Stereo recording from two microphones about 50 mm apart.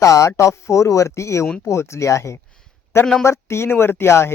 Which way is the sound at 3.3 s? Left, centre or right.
Left.